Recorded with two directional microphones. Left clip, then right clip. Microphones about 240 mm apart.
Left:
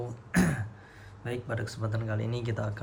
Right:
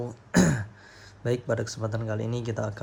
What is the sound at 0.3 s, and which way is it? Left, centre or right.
Throat clearing, centre.